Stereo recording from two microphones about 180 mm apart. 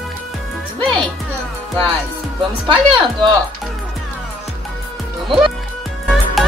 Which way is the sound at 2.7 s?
25° right (ahead or behind).